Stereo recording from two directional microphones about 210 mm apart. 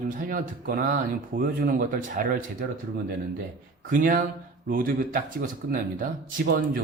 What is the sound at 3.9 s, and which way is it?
Speech, 40° right (ahead or behind).